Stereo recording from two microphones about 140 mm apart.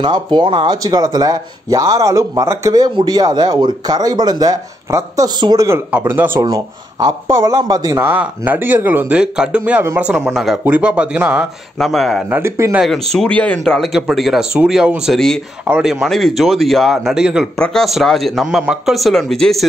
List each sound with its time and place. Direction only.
0.0 s speech: 30° right (ahead or behind)
5.7 s speech: 10° right (ahead or behind)
6.4 s speech: 30° right (ahead or behind); by 12.3 s centre (ahead or behind)
12.3 s speech: 15° right (ahead or behind)
12.7 s speech: centre (ahead or behind)